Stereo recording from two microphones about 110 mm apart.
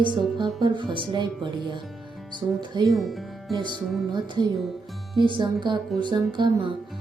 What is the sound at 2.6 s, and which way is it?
Speech, 40° right (ahead or behind).